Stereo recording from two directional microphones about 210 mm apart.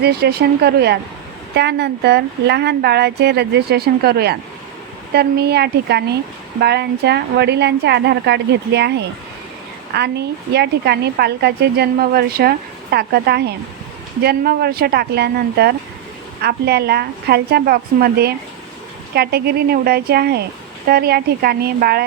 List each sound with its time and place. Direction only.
0.0 s a woman's voice: 50° right (ahead or behind)